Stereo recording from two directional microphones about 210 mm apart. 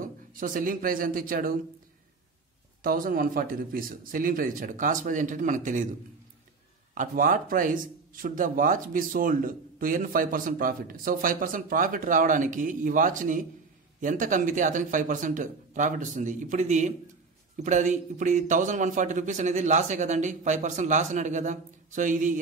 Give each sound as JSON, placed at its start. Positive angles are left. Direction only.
{"t": 0.0, "sound": "a man's voice", "side_deg": -40}
{"t": 2.8, "sound": "speech", "side_deg": -45}
{"t": 6.9, "sound": "speech", "side_deg": -40}